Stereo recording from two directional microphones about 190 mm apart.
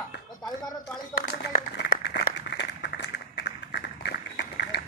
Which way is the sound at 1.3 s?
50° left (ahead or behind).